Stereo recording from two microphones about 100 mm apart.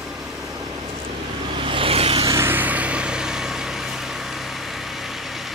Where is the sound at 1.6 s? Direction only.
65° right (ahead or behind).